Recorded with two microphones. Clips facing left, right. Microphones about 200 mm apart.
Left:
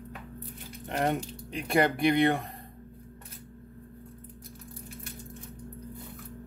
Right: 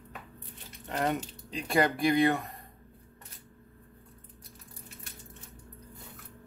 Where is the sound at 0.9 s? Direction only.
30° left (ahead or behind).